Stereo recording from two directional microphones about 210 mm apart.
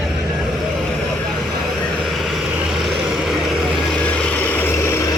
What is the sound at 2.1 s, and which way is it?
Vehicle, centre (ahead or behind).